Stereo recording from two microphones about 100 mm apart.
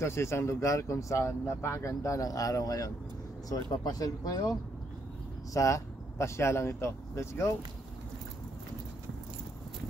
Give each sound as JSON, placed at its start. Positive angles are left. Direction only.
{"t": 0.0, "sound": "speech", "side_deg": 25}